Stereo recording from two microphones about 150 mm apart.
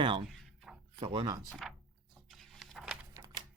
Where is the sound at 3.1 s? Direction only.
30° right (ahead or behind).